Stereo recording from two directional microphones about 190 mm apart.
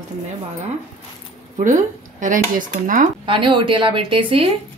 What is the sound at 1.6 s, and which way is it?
Speech, 40° right (ahead or behind).